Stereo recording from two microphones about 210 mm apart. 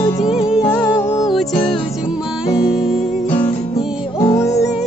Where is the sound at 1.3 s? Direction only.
Centre (ahead or behind).